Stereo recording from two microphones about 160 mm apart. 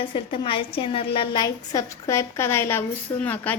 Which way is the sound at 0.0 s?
30° left (ahead or behind).